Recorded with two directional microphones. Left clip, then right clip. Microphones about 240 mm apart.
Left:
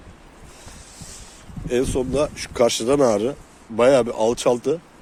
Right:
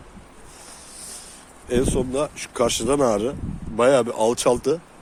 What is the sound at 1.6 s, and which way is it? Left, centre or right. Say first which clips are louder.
Speech: even; centre.